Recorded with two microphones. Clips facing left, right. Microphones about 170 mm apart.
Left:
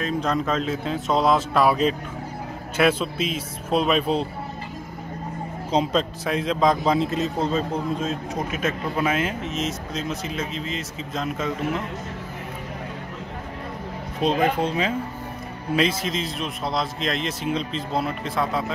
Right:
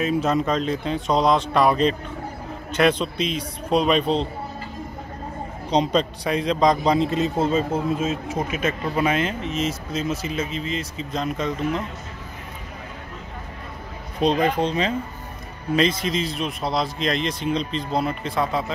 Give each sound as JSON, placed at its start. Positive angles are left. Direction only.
{"t": 0.0, "sound": "a man's voice", "side_deg": -5}
{"t": 5.7, "sound": "a man's voice", "side_deg": 5}
{"t": 14.2, "sound": "a man's voice", "side_deg": 5}